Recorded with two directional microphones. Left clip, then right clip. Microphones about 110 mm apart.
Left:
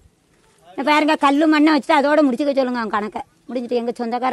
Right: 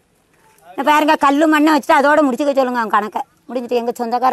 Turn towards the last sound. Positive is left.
turn(degrees=25)  # may be behind; listen again after turning